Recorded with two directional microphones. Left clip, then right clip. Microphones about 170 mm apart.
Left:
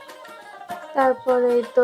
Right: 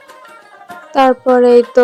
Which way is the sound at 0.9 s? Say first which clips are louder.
Right 9 dB; 40° right (ahead or behind).